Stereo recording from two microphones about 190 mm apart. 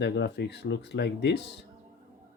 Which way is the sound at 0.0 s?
65° left (ahead or behind).